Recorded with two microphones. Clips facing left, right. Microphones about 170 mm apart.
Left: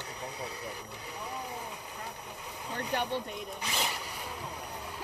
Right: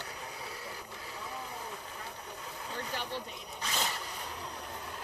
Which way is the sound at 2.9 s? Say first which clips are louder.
Left 8 dB; 60° left (ahead or behind).